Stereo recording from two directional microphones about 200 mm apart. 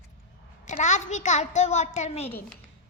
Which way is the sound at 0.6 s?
35° left (ahead or behind).